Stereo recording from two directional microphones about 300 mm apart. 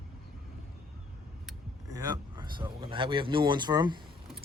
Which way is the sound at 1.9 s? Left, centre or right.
Centre.